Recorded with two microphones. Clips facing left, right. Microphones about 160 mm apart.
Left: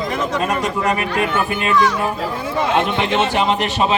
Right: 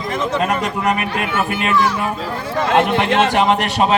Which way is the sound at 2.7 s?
65° right (ahead or behind).